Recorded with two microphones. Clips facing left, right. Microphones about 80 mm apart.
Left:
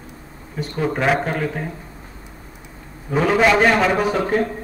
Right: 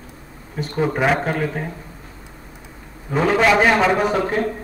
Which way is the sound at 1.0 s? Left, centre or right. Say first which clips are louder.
Even; centre.